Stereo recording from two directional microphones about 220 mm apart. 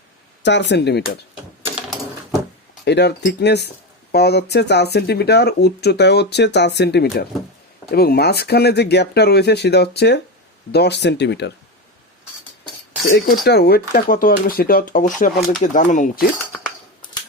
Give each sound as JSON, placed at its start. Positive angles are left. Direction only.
{"t": 0.4, "sound": "speech", "side_deg": 50}
{"t": 2.8, "sound": "speech", "side_deg": 50}
{"t": 13.1, "sound": "speech", "side_deg": 45}